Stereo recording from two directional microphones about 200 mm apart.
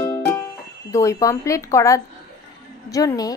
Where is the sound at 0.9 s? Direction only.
15° left (ahead or behind).